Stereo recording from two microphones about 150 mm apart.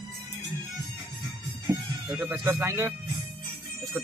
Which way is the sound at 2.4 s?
20° right (ahead or behind).